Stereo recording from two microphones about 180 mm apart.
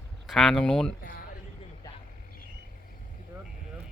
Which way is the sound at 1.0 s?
55° left (ahead or behind).